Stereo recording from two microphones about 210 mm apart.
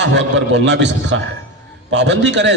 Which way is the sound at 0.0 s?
60° right (ahead or behind).